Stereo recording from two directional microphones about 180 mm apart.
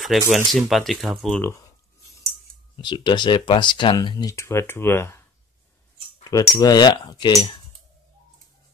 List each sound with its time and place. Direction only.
0.0 s speech: centre (ahead or behind)
1.4 s speech: 15° left (ahead or behind)
2.8 s speech: 25° left (ahead or behind)
6.2 s speech: 20° left (ahead or behind)